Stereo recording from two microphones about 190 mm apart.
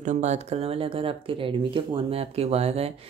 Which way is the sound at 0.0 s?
40° right (ahead or behind).